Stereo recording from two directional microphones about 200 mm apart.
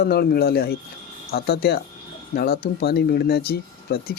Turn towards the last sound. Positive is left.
turn(degrees=50)  # may be behind; listen again after turning